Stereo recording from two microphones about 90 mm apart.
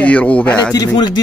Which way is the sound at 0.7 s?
50° left (ahead or behind).